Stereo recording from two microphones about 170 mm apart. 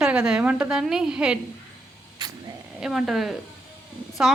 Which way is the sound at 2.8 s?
5° right (ahead or behind).